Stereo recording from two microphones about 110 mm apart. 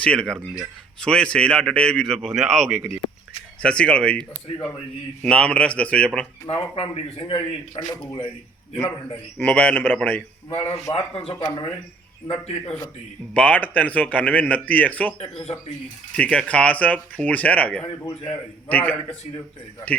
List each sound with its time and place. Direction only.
0.0 s speech: 10° left (ahead or behind)
6.5 s speech: 60° left (ahead or behind)
9.4 s speech: 15° left (ahead or behind)
10.5 s speech: 65° left (ahead or behind)
11.3 s speech: 35° left (ahead or behind)
12.3 s speech: 65° left (ahead or behind)
13.3 s speech: 10° left (ahead or behind)
15.2 s speech: 70° left (ahead or behind)
16.1 s speech: 10° left (ahead or behind)